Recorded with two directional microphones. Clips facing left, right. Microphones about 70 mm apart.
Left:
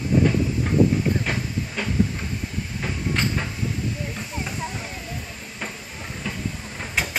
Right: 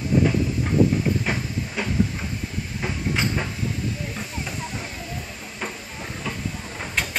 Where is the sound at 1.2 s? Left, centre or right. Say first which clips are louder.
Even; centre.